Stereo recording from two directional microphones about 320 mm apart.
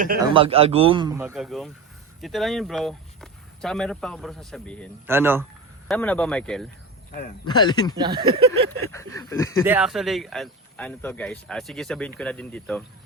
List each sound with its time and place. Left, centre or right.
0.0 s a man's voice: right; by 4.9 s centre
5.0 s a man's voice: centre
5.9 s speech: centre
7.4 s speech: centre
7.9 s a man's voice: centre
9.1 s speech: centre
9.6 s speech: centre